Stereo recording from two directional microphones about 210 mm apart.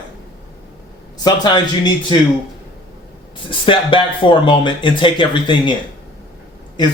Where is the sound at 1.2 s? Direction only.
20° left (ahead or behind).